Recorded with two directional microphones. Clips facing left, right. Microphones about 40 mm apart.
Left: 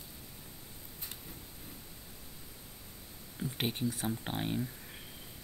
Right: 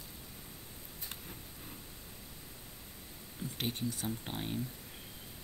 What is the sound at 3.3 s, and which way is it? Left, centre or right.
Speech, left.